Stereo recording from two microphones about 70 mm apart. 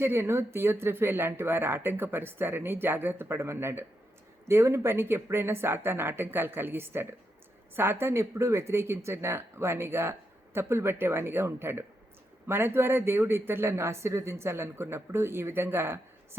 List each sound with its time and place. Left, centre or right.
0.0 s speech: right